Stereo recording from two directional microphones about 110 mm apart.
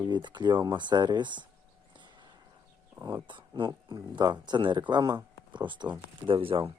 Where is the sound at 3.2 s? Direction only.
45° right (ahead or behind).